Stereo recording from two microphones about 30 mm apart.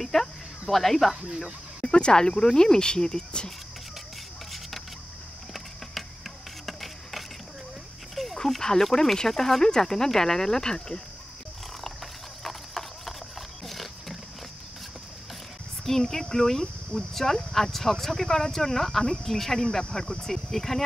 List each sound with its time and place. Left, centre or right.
0.0 s speech: centre
1.9 s speech: left
4.5 s a sound: centre
6.6 s printer: centre
8.2 s a sound: centre
8.5 s speech: centre
12.4 s clip-clop: centre
13.7 s a sound: centre
15.8 s speech: centre
19.6 s speech: left; by 20.8 s centre